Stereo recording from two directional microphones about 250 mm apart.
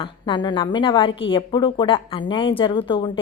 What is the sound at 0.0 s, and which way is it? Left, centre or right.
A woman's voice, centre.